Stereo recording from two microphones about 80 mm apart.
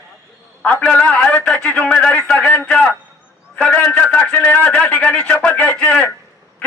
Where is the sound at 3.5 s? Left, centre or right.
Centre.